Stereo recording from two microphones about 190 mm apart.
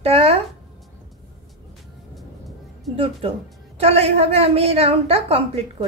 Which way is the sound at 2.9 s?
30° right (ahead or behind).